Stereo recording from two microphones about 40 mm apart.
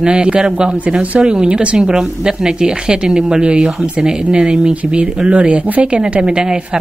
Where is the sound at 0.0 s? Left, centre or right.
Right.